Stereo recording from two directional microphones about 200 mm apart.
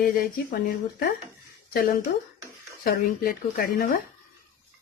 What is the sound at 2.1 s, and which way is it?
Speech, 60° left (ahead or behind).